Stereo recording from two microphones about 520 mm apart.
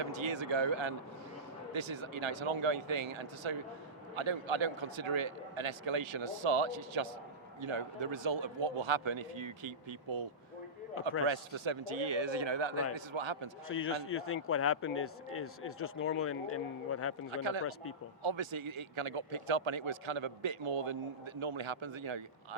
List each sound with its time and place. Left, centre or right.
0.1 s a man's voice: right
11.5 s a man's voice: right
13.7 s speech: left
17.3 s a man's voice: right
18.9 s a man's voice: right